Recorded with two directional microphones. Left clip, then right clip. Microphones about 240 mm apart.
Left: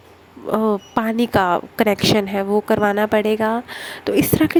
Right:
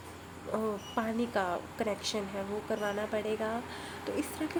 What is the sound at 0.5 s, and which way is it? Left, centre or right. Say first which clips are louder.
A woman's voice: left 14 dB; left.